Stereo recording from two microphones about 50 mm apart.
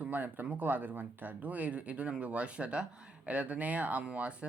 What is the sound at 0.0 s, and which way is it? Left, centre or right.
Speech, right.